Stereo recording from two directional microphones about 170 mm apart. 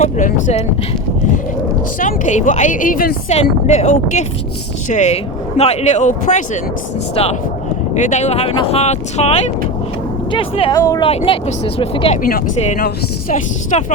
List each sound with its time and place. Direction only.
0.0 s speech: 45° left (ahead or behind)
2.0 s speech: 50° left (ahead or behind)
3.2 s speech: 40° left (ahead or behind)
7.2 s speech: 35° left (ahead or behind)
7.9 s speech: 45° left (ahead or behind)
10.8 s speech: 20° left (ahead or behind)
11.0 s speech: 35° left (ahead or behind)
12.6 s speech: 50° left (ahead or behind)